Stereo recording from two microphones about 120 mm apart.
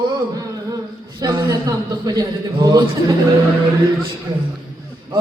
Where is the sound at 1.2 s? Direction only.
35° right (ahead or behind).